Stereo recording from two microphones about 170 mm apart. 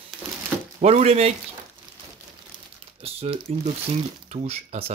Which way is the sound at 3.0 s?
35° right (ahead or behind).